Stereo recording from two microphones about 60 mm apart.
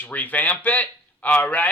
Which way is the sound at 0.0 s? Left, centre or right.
Left.